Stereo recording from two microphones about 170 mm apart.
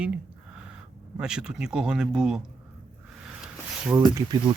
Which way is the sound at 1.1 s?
5° right (ahead or behind).